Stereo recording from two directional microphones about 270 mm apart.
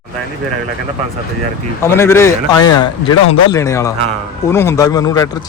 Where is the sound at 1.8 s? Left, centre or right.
Centre.